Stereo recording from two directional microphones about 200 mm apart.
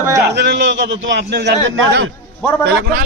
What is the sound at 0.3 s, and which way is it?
A man's voice, 60° right (ahead or behind).